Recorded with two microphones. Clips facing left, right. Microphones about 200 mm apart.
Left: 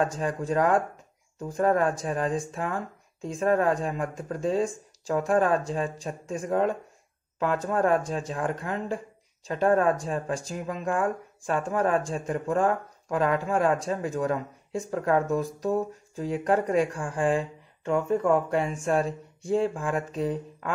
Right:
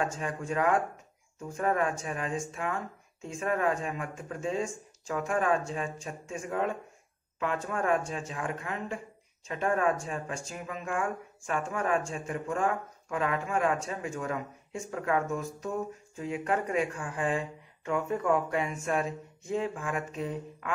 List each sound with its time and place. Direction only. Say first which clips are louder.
0.0 s speech: left 5 dB; 35° left (ahead or behind)